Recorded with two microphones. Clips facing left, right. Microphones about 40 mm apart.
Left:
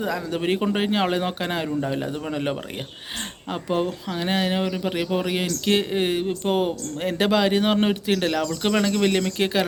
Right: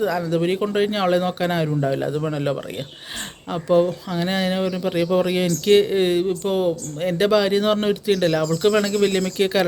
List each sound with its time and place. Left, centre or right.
0.3 s speech: left
1.6 s a man's voice: centre
2.1 s speech: centre
6.4 s speech: left
7.0 s speech: left
8.1 s speech: centre